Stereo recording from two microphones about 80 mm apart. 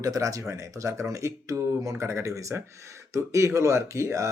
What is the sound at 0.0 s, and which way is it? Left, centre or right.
Speech, right.